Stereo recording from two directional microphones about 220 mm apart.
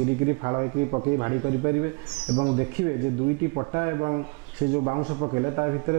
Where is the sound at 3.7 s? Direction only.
20° right (ahead or behind).